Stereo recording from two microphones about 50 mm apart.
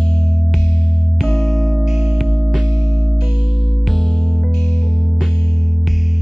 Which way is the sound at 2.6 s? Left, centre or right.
Right.